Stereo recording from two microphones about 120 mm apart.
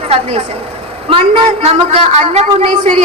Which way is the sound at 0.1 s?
60° right (ahead or behind).